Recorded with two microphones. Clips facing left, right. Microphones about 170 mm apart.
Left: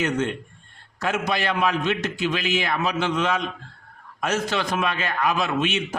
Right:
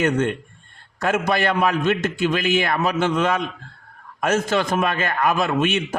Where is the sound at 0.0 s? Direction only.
55° right (ahead or behind).